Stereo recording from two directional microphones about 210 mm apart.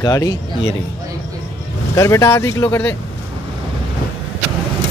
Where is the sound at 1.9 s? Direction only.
15° left (ahead or behind).